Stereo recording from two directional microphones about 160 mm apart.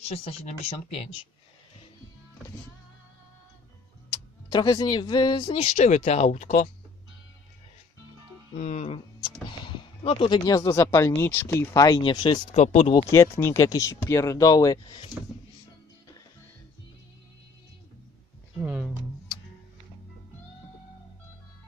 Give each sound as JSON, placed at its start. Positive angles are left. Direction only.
{"t": 0.0, "sound": "speech", "side_deg": 40}
{"t": 4.1, "sound": "speech", "side_deg": 25}
{"t": 8.5, "sound": "speech", "side_deg": 45}
{"t": 12.5, "sound": "speech", "side_deg": 40}
{"t": 12.9, "sound": "speech", "side_deg": 20}
{"t": 18.6, "sound": "a sound", "side_deg": -10}